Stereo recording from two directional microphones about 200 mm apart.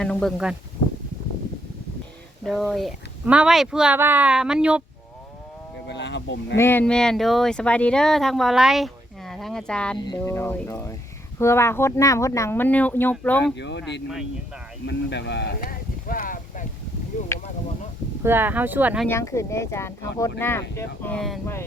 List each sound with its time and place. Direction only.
0.0 s speech: 5° left (ahead or behind)
2.4 s speech: centre (ahead or behind)
5.9 s speech: 60° left (ahead or behind)
6.6 s speech: 10° left (ahead or behind)
13.4 s speech: 60° left (ahead or behind); by 16.6 s 45° left (ahead or behind)
18.2 s speech: 10° right (ahead or behind)
19.0 s speech: 15° left (ahead or behind)